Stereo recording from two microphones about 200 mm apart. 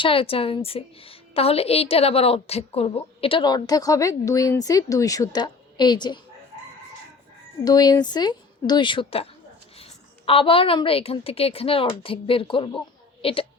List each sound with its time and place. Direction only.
0.0 s a woman's voice: 25° left (ahead or behind)
7.6 s a woman's voice: 20° left (ahead or behind)